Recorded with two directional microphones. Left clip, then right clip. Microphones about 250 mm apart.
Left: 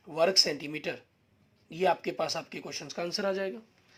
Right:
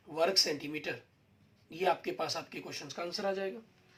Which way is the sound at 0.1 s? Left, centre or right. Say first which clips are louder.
Left 4 dB; left.